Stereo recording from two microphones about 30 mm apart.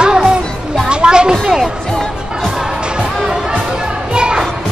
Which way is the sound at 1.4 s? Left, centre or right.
Centre.